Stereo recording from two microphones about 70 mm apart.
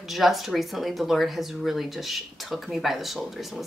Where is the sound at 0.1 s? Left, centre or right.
Centre.